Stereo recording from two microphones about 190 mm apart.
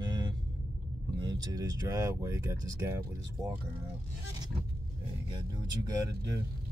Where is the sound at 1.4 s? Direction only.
20° right (ahead or behind).